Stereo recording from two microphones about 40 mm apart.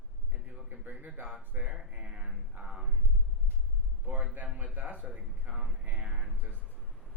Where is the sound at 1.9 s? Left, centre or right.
Right.